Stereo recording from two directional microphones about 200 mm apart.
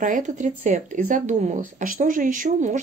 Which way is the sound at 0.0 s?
40° right (ahead or behind).